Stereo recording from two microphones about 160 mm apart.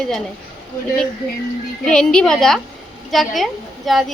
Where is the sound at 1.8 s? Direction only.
5° left (ahead or behind).